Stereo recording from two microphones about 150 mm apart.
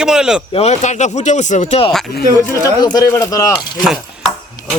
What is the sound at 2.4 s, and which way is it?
A man's voice, 20° left (ahead or behind).